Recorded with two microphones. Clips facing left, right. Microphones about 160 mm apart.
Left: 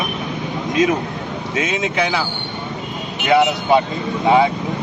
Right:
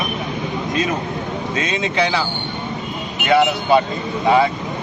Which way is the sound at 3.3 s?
20° left (ahead or behind).